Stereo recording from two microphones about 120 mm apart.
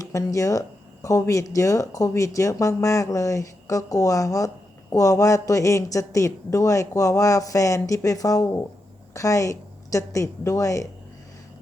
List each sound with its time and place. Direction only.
0.0 s speech: 25° left (ahead or behind)